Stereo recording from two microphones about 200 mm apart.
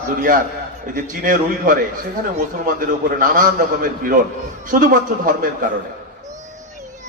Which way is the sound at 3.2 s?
40° right (ahead or behind).